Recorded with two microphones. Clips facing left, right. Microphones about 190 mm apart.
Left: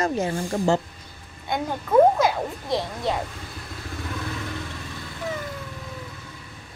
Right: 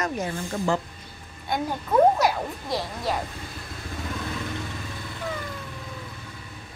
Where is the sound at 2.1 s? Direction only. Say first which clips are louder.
Left 1 dB; 20° left (ahead or behind).